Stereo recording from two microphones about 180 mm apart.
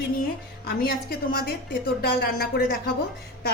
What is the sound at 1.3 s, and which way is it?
A woman's voice, 55° left (ahead or behind).